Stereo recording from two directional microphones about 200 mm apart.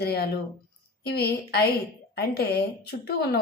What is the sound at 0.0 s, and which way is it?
A woman's voice, 50° left (ahead or behind).